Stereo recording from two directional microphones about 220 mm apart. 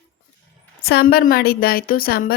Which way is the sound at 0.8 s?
45° left (ahead or behind).